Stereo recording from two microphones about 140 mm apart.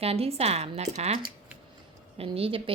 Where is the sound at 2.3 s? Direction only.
40° right (ahead or behind).